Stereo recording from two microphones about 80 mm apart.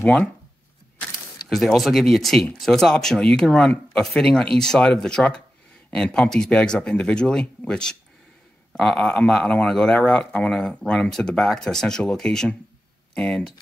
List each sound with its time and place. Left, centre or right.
0.0 s speech: centre
1.5 s speech: centre